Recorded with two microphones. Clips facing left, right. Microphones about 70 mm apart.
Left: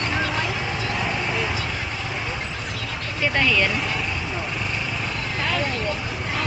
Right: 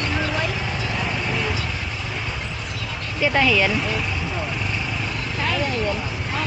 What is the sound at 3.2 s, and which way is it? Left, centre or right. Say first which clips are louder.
Speech: right 3 dB; centre.